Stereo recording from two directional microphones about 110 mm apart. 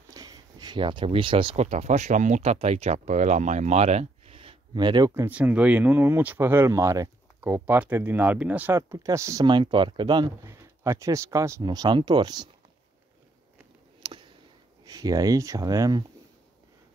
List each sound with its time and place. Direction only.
0.1 s a sound: 35° right (ahead or behind); by 1.6 s 50° right (ahead or behind)
1.6 s speech: 85° right; by 5.1 s 40° right (ahead or behind)
5.1 s speech: 15° right (ahead or behind)
9.5 s speech: 45° right (ahead or behind)
10.4 s speech: 30° right (ahead or behind)
11.6 s speech: 40° right (ahead or behind)
14.9 s speech: 35° right (ahead or behind)